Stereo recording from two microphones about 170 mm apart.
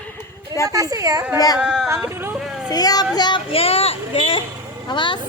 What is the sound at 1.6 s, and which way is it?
Speech, 5° right (ahead or behind).